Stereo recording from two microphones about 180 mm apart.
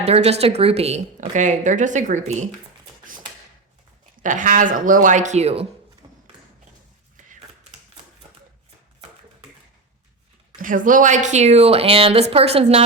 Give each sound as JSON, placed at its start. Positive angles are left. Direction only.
{"t": 0.0, "sound": "speech", "side_deg": -35}
{"t": 4.2, "sound": "speech", "side_deg": -45}
{"t": 6.0, "sound": "thump", "side_deg": -25}
{"t": 7.2, "sound": "a sound", "side_deg": -45}
{"t": 10.6, "sound": "speech", "side_deg": -50}